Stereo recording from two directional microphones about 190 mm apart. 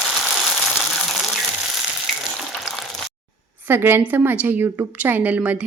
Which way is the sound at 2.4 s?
Centre (ahead or behind).